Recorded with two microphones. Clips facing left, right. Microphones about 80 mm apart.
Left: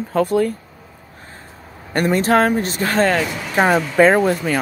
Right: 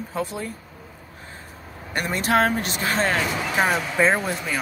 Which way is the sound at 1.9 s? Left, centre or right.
Left.